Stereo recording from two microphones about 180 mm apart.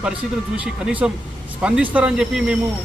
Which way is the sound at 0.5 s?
5° right (ahead or behind).